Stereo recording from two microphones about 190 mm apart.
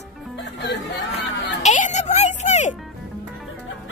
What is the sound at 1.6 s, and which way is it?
Music, 40° left (ahead or behind).